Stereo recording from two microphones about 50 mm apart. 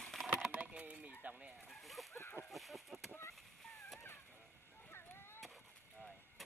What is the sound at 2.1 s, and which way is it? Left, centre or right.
Speech, left.